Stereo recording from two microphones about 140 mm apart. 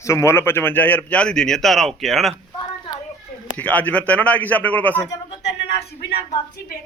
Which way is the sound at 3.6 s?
10° left (ahead or behind).